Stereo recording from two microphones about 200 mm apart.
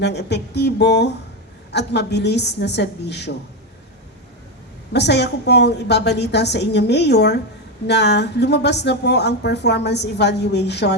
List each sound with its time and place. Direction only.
0.0 s speech: 60° left (ahead or behind)
4.9 s speech: 60° left (ahead or behind)